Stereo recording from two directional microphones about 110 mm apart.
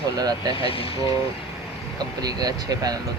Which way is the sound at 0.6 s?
60° left (ahead or behind).